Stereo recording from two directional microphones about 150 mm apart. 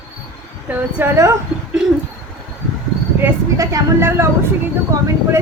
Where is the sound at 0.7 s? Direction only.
10° right (ahead or behind).